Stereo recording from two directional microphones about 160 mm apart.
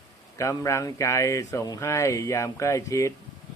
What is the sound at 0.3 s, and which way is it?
Speech, 20° left (ahead or behind).